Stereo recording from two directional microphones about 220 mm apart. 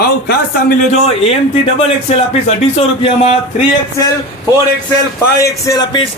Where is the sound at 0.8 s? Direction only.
30° left (ahead or behind).